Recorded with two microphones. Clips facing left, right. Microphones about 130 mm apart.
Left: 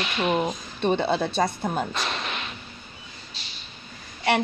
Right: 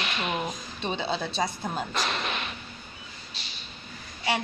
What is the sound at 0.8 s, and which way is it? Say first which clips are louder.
Speech: left 7 dB; 55° left (ahead or behind).